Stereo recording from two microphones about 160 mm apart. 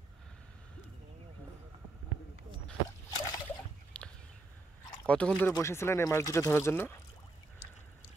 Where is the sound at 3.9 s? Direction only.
10° left (ahead or behind).